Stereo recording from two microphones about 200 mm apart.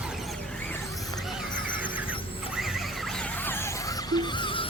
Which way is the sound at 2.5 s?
Centre (ahead or behind).